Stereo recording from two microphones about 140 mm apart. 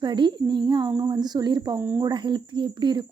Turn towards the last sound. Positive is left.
turn(degrees=-35)  # may be behind; listen again after turning